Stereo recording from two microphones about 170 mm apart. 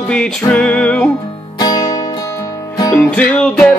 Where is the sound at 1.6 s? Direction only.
20° left (ahead or behind).